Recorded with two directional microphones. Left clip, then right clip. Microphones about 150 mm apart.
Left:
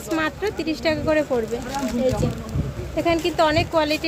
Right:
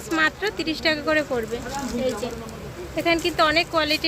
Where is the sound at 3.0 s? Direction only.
20° left (ahead or behind).